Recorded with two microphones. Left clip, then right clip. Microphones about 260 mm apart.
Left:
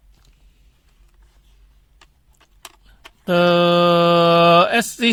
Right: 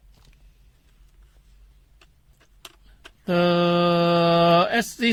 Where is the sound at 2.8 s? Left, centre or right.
Left.